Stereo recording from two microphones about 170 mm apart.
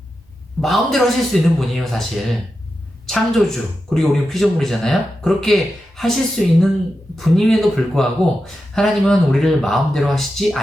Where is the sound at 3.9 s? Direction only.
Centre (ahead or behind).